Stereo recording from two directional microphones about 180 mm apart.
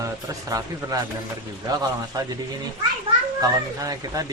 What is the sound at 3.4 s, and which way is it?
Speech, 20° right (ahead or behind).